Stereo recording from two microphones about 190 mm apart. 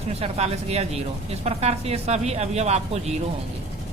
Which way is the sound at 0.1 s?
35° right (ahead or behind).